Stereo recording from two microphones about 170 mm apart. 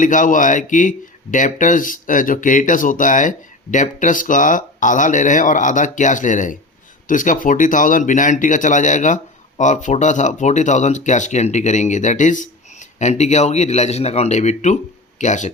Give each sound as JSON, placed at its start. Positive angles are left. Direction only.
{"t": 0.0, "sound": "speech", "side_deg": 50}